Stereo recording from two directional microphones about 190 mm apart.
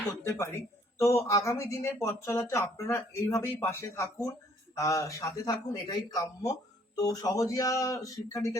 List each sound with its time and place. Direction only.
0.0 s speech: 15° left (ahead or behind)